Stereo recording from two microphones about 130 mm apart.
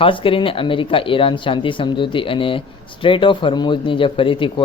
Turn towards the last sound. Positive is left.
turn(degrees=40)  # may be behind; listen again after turning